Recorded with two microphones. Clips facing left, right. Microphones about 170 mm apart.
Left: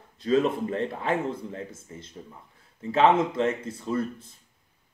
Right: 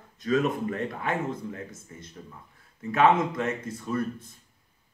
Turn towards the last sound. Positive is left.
turn(degrees=25)  # may be behind; listen again after turning